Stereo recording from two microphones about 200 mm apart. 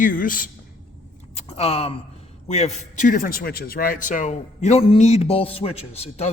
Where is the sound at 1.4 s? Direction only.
30° left (ahead or behind).